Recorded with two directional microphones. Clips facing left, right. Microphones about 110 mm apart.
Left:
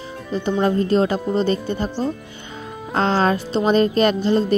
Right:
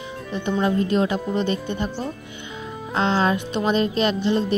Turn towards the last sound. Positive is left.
turn(degrees=40)  # may be behind; listen again after turning